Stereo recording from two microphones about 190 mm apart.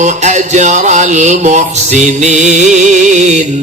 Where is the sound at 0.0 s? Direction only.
40° right (ahead or behind).